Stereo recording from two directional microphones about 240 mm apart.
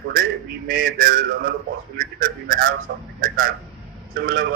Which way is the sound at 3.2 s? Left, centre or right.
Right.